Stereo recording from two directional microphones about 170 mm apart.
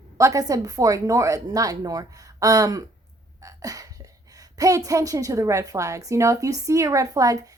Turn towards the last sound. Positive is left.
turn(degrees=-20)  # may be behind; listen again after turning